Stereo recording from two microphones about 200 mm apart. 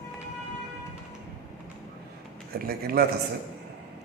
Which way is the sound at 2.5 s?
50° right (ahead or behind).